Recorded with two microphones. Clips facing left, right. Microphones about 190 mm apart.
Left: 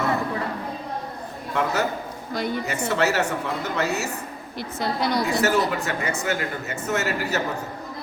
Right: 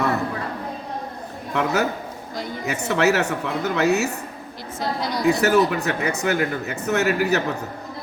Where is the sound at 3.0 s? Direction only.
65° right (ahead or behind).